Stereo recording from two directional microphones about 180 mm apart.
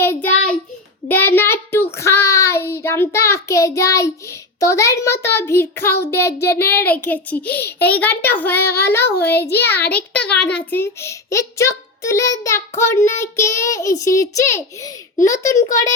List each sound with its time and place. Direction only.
0.0 s child singing: 10° left (ahead or behind)